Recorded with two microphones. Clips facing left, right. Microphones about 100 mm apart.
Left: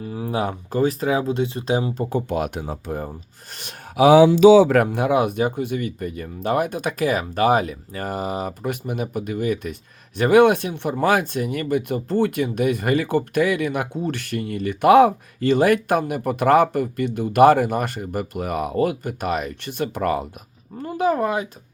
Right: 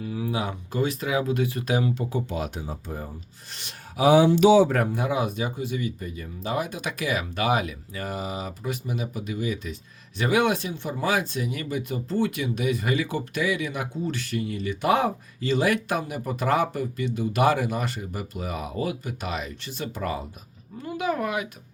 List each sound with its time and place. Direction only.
0.0 s speech: 40° left (ahead or behind)
2.0 s speech: 50° left (ahead or behind)
3.5 s a sound: 50° left (ahead or behind)
3.9 s speech: 90° left; by 20.2 s 60° left (ahead or behind)
20.8 s speech: 40° left (ahead or behind)